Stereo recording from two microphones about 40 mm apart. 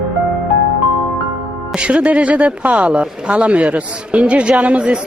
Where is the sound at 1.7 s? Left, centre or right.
Right.